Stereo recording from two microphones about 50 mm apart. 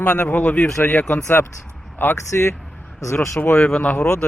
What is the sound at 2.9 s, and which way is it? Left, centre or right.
Speech, left.